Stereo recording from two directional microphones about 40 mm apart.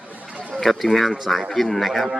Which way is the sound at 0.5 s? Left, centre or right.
Centre.